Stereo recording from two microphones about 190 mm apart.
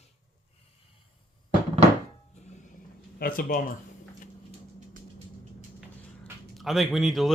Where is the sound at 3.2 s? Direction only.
50° left (ahead or behind).